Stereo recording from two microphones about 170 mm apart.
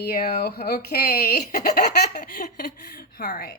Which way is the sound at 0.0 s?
65° left (ahead or behind).